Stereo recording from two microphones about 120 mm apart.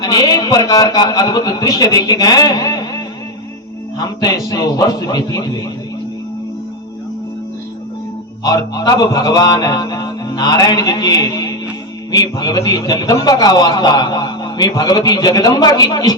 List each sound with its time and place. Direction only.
0.0 s a man's voice: 30° left (ahead or behind)
8.4 s a man's voice: 30° left (ahead or behind)